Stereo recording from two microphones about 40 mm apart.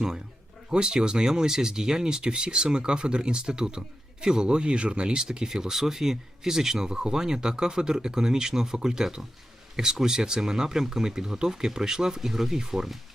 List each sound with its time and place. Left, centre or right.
0.7 s speech: centre